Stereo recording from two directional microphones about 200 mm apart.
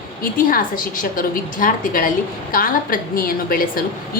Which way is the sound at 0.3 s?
45° left (ahead or behind).